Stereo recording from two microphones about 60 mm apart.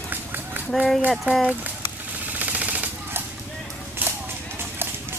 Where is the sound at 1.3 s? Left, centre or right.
Right.